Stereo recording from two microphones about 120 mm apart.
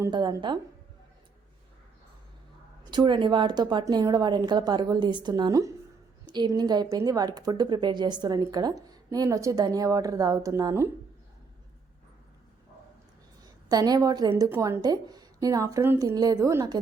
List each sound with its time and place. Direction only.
0.1 s a woman's voice: 35° right (ahead or behind)
2.9 s a woman's voice: 40° right (ahead or behind)
13.4 s a woman's voice: 30° right (ahead or behind)